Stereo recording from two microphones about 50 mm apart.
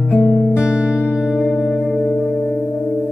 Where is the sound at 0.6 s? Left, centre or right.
Right.